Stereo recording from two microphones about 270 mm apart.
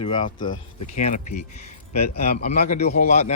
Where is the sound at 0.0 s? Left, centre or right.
Centre.